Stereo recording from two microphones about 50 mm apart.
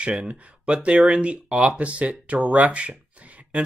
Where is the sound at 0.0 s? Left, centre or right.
Right.